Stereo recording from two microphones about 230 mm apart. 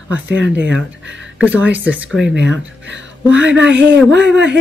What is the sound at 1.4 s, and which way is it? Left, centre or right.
Speech, centre.